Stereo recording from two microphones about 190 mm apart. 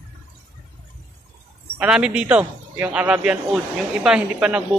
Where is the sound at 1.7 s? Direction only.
5° right (ahead or behind).